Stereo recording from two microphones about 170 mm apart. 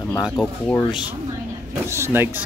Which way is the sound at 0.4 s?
5° left (ahead or behind).